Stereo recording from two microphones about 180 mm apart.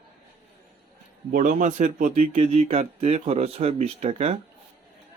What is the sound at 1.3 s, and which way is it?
Speech, 45° right (ahead or behind).